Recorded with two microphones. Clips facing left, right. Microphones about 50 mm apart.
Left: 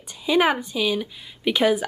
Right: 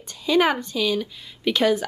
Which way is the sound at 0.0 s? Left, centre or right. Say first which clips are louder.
Even; centre.